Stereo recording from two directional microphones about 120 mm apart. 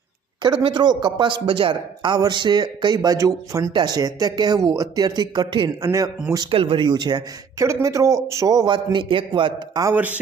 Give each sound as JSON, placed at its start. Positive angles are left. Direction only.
{"t": 0.4, "sound": "speech", "side_deg": -40}
{"t": 3.7, "sound": "speech", "side_deg": -40}
{"t": 7.6, "sound": "speech", "side_deg": -25}
{"t": 9.9, "sound": "speech", "side_deg": -15}